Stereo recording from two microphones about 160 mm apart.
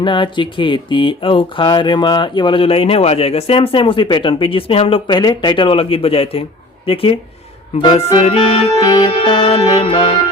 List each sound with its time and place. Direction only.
0.0 s speech: 30° left (ahead or behind)